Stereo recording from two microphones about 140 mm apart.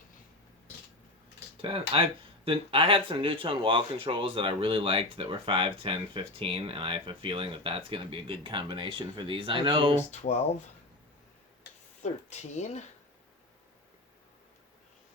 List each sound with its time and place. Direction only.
1.6 s speech: 40° right (ahead or behind)
10.1 s speech: 55° left (ahead or behind)
12.0 s speech: 55° left (ahead or behind)